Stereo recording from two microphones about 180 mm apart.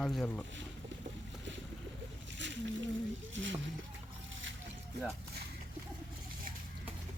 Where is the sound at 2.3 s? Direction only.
90° right.